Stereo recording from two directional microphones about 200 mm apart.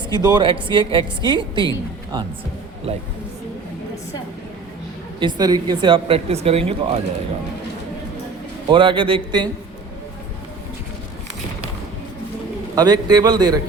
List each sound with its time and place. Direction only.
0.1 s speech: 20° right (ahead or behind)
5.2 s speech: 20° right (ahead or behind)
8.7 s speech: 25° right (ahead or behind)
12.7 s speech: 20° right (ahead or behind)